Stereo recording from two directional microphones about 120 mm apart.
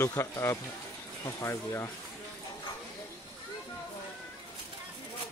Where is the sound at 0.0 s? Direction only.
25° left (ahead or behind).